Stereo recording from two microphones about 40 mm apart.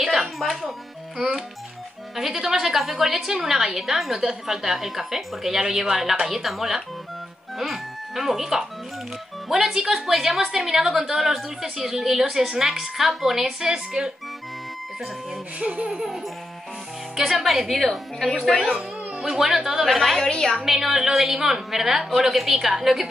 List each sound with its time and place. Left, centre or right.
0.0 s music: centre
2.1 s a woman's voice: centre
13.6 s speech: centre
15.6 s laughter: right
17.3 s a woman's voice: centre
19.1 s a woman's voice: centre
20.2 s a woman's voice: centre
20.5 s a woman's voice: centre